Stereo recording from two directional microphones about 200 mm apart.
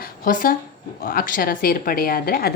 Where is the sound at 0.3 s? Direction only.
45° left (ahead or behind).